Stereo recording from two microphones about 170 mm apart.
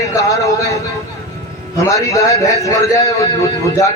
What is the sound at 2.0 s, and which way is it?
Speech, 20° left (ahead or behind).